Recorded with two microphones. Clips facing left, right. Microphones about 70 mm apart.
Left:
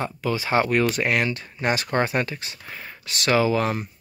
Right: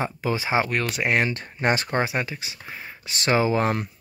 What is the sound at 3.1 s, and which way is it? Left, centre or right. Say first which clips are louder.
Speech: left 1 dB; right.